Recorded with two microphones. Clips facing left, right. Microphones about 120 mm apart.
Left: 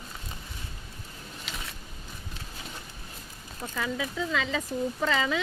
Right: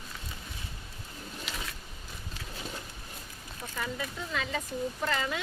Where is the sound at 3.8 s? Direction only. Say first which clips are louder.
Left 5 dB; 90° left.